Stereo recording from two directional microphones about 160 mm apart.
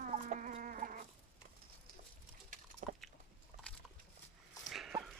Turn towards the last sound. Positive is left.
turn(degrees=0)  # may be behind; listen again after turning